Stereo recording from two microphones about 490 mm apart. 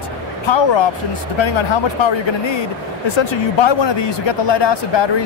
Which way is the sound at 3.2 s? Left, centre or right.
Left.